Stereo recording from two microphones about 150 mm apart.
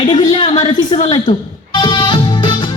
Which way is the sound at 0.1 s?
35° left (ahead or behind).